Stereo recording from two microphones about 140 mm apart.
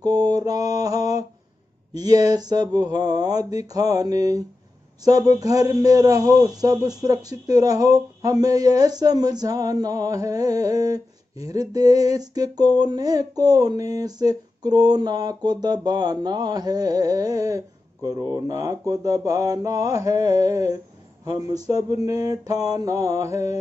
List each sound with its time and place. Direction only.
0.0 s mantra: 25° right (ahead or behind)
2.0 s a man's voice: 25° right (ahead or behind)